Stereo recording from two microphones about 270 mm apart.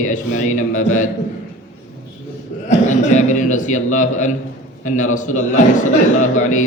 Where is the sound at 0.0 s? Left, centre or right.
Left.